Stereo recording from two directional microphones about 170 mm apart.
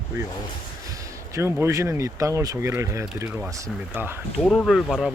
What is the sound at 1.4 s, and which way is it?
Speech, 15° right (ahead or behind).